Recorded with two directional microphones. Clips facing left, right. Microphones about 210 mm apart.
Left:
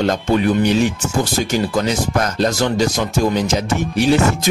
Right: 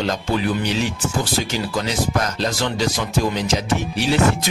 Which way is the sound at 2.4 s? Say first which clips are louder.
Left 5 dB; 45° left (ahead or behind).